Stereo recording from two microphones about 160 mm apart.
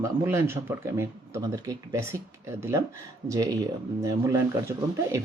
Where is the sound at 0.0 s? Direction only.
15° right (ahead or behind).